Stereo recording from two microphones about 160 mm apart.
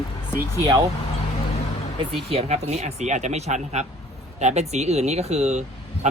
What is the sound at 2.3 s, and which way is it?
Speech, 40° right (ahead or behind).